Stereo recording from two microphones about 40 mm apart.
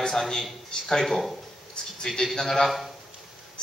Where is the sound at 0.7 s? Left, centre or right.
Centre.